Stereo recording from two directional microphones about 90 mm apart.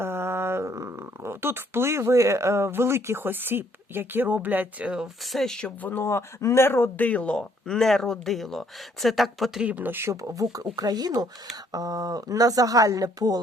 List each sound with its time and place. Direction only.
0.0 s speech: 25° right (ahead or behind)
5.2 s speech: centre (ahead or behind)
5.9 s speech: 30° left (ahead or behind); by 9.6 s centre (ahead or behind)
9.6 s speech: 20° right (ahead or behind)
10.1 s speech: 35° right (ahead or behind)